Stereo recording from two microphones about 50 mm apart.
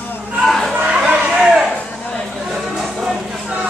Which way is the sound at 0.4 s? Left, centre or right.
Centre.